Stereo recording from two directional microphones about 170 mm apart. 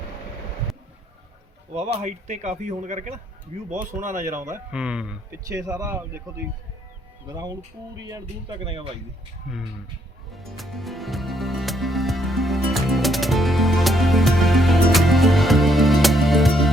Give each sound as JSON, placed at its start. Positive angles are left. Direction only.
{"t": 1.7, "sound": "speech", "side_deg": -40}
{"t": 4.3, "sound": "speech", "side_deg": -15}
{"t": 4.7, "sound": "speech", "side_deg": -5}
{"t": 5.5, "sound": "speech", "side_deg": -20}
{"t": 8.4, "sound": "speech", "side_deg": -35}
{"t": 9.5, "sound": "speech", "side_deg": -5}
{"t": 10.3, "sound": "music", "side_deg": 0}